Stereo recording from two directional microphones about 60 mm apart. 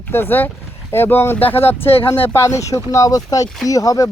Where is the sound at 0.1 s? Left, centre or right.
Left.